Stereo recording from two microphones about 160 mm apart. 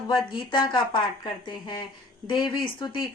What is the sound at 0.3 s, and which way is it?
Speech, 30° left (ahead or behind).